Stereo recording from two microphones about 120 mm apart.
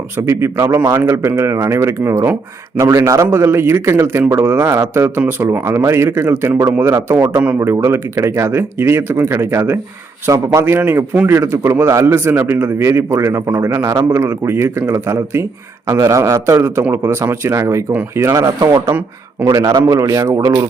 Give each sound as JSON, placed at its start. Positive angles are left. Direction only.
{"t": 0.2, "sound": "a man's voice", "side_deg": -20}